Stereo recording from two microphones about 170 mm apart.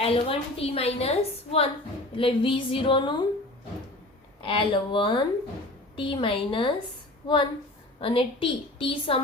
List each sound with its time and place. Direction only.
0.0 s a woman's voice: 35° left (ahead or behind)
4.4 s a woman's voice: 30° left (ahead or behind)
7.9 s a woman's voice: 30° left (ahead or behind)